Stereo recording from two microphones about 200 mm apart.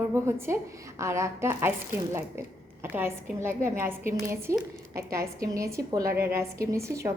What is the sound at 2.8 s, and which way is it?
A woman's voice, 10° right (ahead or behind).